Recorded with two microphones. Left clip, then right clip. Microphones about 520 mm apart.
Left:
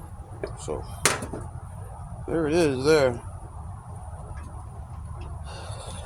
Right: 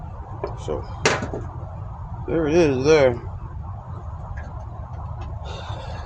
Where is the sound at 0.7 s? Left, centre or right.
Left.